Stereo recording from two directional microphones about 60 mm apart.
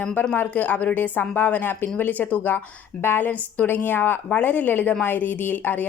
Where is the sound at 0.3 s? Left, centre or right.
Left.